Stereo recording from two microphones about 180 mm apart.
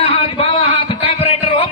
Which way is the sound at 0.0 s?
30° left (ahead or behind).